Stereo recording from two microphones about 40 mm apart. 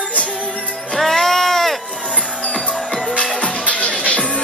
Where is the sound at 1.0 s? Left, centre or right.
Centre.